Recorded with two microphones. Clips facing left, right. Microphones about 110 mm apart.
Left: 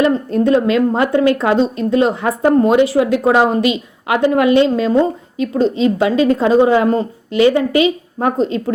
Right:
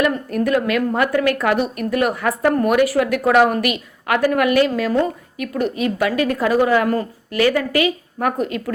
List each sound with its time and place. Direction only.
0.0 s a woman's voice: 25° left (ahead or behind)